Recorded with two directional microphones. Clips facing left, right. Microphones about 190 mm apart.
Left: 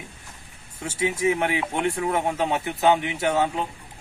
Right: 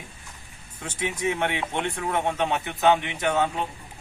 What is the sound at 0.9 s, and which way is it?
Speech, 5° left (ahead or behind).